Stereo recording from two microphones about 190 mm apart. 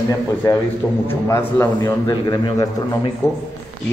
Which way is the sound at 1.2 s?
15° left (ahead or behind).